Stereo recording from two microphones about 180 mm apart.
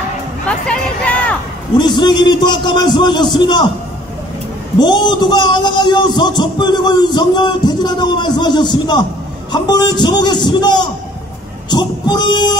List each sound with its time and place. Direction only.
0.5 s music: 5° left (ahead or behind)
1.8 s a man's voice: 25° left (ahead or behind)
4.7 s a man's voice: 25° left (ahead or behind)